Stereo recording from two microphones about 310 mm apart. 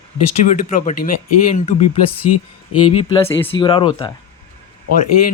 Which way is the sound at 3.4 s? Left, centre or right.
Centre.